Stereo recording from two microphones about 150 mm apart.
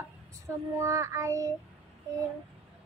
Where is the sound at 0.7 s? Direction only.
20° right (ahead or behind).